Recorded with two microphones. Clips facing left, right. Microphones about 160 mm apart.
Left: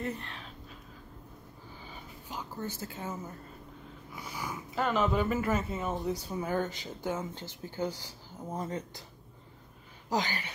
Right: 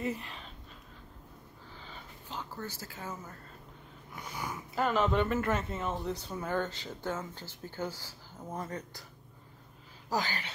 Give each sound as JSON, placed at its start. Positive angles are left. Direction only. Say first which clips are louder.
{"t": 0.0, "sound": "speech", "louder": "right 1 dB", "side_deg": -5}
{"t": 1.9, "sound": "a sound", "louder": "left 1 dB", "side_deg": 10}
{"t": 4.7, "sound": "speech", "louder": "even", "side_deg": 0}
{"t": 10.0, "sound": "speech", "louder": "left 2 dB", "side_deg": 15}